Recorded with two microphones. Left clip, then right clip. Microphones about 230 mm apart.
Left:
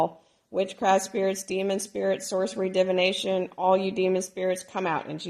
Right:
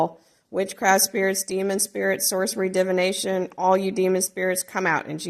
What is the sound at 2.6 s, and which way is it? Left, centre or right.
Speech, right.